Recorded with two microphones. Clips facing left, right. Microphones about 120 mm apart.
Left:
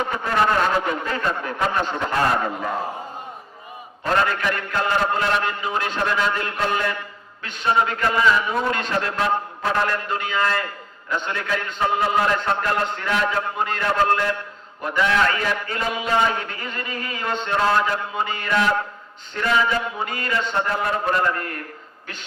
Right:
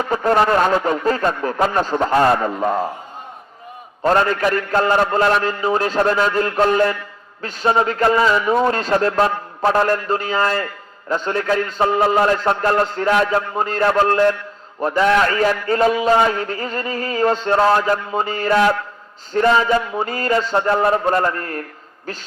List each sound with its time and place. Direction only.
0.0 s a man's voice: 40° right (ahead or behind)
4.0 s a man's voice: 40° right (ahead or behind)